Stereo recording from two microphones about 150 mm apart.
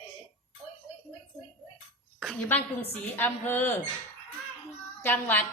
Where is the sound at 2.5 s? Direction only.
15° left (ahead or behind).